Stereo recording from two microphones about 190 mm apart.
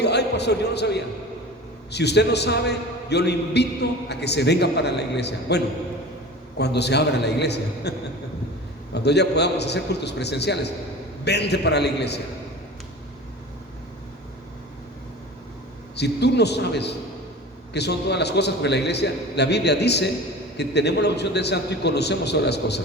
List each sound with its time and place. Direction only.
0.0 s a man's voice: 60° left (ahead or behind)
16.0 s a man's voice: 60° left (ahead or behind)